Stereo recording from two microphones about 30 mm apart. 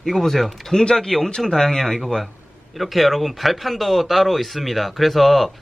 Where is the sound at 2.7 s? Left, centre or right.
Centre.